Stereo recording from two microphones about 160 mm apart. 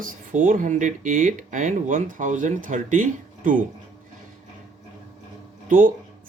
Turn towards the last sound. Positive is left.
turn(degrees=-55)  # may be behind; listen again after turning